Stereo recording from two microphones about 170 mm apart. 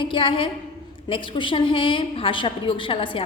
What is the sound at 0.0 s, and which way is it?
A woman's voice, 30° left (ahead or behind).